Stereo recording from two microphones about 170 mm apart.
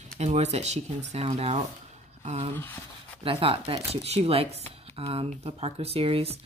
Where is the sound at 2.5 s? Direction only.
10° left (ahead or behind).